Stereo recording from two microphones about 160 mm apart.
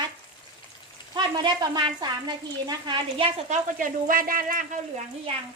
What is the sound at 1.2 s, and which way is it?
A woman's voice, 25° right (ahead or behind).